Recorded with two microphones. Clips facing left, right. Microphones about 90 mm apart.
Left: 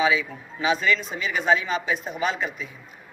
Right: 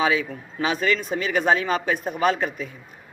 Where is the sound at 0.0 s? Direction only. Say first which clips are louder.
Even; 45° right (ahead or behind).